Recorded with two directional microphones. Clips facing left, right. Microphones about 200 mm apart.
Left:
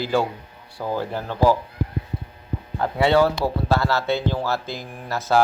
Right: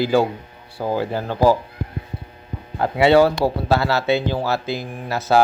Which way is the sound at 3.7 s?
70° right (ahead or behind).